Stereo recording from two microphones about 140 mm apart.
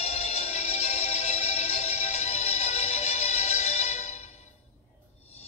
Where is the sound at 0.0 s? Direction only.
45° left (ahead or behind).